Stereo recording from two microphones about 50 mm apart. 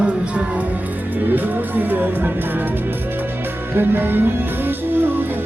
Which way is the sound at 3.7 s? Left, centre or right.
Right.